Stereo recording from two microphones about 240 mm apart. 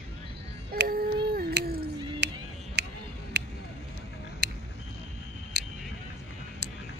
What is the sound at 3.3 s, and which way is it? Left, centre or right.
Vehicle, right.